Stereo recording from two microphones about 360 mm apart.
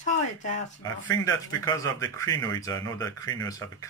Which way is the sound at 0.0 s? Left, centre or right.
Left.